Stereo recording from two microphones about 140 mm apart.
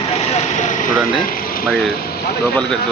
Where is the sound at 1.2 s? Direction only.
90° left.